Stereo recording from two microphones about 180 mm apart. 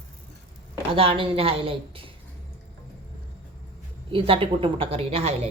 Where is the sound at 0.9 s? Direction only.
30° right (ahead or behind).